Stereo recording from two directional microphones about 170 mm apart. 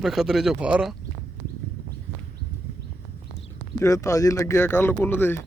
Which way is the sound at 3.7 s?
20° left (ahead or behind).